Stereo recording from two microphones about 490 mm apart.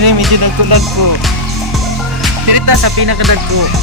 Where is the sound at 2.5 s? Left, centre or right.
Right.